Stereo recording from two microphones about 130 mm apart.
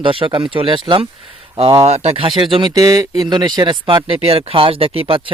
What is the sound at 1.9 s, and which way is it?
Speech, 55° right (ahead or behind).